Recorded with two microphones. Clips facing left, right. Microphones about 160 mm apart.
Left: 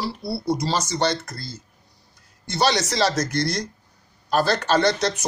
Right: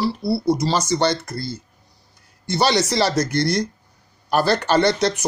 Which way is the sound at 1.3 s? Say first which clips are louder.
Right 8 dB; 65° right (ahead or behind).